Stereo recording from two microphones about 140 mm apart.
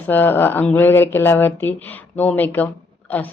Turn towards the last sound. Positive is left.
turn(degrees=10)  # may be behind; listen again after turning